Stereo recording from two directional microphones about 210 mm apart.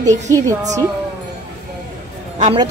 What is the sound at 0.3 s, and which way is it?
Speech, 15° right (ahead or behind).